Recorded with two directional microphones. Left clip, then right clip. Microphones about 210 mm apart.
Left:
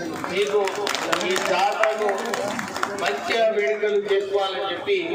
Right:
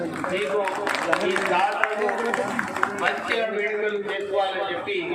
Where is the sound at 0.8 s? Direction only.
55° left (ahead or behind).